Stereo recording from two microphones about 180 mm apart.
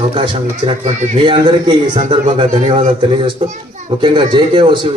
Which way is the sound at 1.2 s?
25° right (ahead or behind).